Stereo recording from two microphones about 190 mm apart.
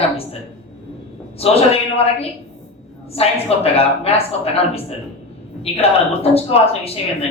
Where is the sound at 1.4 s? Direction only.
30° left (ahead or behind).